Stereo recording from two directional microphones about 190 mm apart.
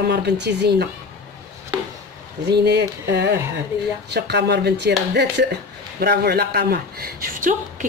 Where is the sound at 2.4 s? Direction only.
60° right (ahead or behind).